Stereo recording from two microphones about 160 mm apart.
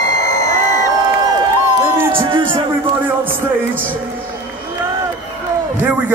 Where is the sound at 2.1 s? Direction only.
35° right (ahead or behind).